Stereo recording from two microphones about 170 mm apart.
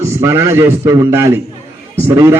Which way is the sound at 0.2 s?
15° right (ahead or behind).